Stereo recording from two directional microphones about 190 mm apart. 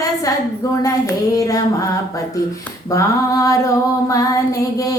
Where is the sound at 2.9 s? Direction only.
20° left (ahead or behind).